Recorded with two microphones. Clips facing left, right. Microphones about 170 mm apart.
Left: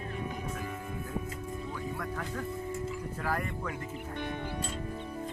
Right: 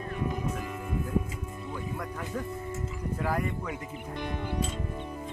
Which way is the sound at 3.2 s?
10° right (ahead or behind).